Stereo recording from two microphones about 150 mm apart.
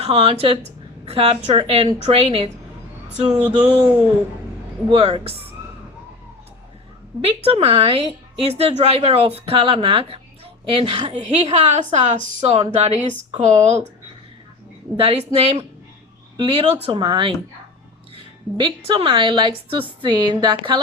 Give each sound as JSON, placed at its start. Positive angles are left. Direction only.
{"t": 0.0, "sound": "a woman's voice", "side_deg": -40}
{"t": 3.2, "sound": "a sound", "side_deg": -10}
{"t": 4.9, "sound": "a woman's voice", "side_deg": -35}
{"t": 7.2, "sound": "a woman's voice", "side_deg": -40}
{"t": 14.9, "sound": "a woman's voice", "side_deg": -45}